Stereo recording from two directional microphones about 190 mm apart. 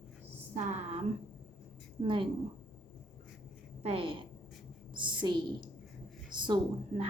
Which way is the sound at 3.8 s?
30° right (ahead or behind).